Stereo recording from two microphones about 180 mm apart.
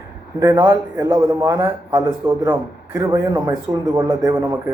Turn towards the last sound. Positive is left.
turn(degrees=-15)  # may be behind; listen again after turning